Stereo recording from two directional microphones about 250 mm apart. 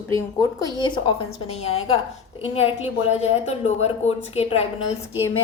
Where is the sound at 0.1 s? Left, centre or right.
Centre.